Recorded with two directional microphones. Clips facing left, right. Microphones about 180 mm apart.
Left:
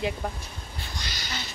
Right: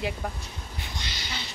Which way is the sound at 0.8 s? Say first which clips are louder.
Left 1 dB; 25° right (ahead or behind).